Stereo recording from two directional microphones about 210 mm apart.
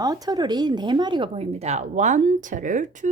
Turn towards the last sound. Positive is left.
turn(degrees=-35)  # may be behind; listen again after turning